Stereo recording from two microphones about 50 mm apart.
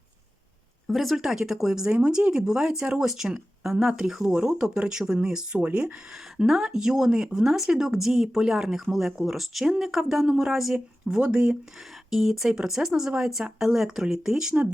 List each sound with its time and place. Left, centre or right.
0.9 s speech: centre
5.6 s speech: right
6.3 s speech: centre
11.2 s speech: centre
12.1 s speech: centre